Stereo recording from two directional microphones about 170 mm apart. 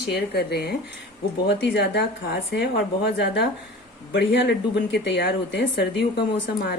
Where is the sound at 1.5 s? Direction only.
85° left.